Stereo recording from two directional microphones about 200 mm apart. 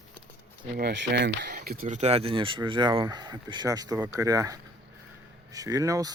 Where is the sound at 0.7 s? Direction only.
55° right (ahead or behind).